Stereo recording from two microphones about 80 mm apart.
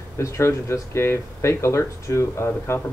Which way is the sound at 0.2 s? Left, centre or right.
Left.